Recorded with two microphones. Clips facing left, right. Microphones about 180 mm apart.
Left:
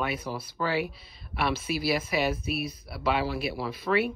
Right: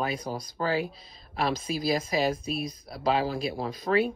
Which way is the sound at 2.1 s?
40° right (ahead or behind).